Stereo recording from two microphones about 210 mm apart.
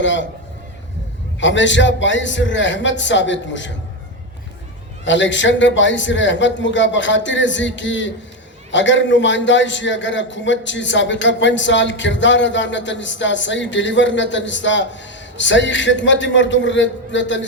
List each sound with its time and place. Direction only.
0.0 s a man's voice: 60° left (ahead or behind)
1.4 s a man's voice: 60° left (ahead or behind)
5.0 s a man's voice: 60° left (ahead or behind)